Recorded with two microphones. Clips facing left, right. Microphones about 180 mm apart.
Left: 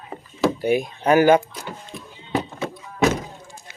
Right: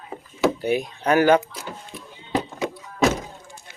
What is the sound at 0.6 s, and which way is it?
Speech, 10° left (ahead or behind).